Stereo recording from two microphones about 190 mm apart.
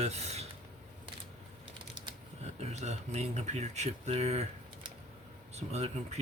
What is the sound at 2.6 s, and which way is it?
Speech, 35° right (ahead or behind).